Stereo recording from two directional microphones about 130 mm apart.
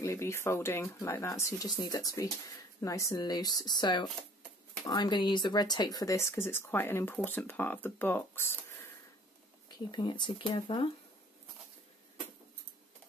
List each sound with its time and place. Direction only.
0.0 s speech: 20° left (ahead or behind)
9.7 s speech: 35° left (ahead or behind)